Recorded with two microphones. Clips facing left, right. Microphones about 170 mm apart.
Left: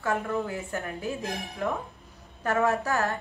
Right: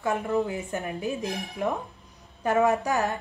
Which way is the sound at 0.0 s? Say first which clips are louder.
Right 3 dB; 20° right (ahead or behind).